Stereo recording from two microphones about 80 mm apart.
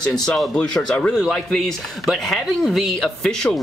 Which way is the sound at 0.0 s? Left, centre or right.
Centre.